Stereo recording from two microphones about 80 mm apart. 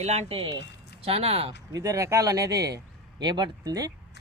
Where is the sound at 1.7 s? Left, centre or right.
Right.